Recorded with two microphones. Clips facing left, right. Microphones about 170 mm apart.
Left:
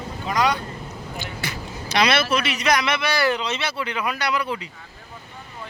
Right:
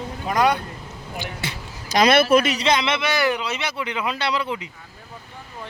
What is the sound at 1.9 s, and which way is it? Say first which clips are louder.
Speech: right 5 dB; 45° right (ahead or behind).